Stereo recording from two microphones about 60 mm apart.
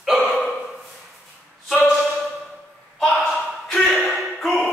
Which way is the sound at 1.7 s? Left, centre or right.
Centre.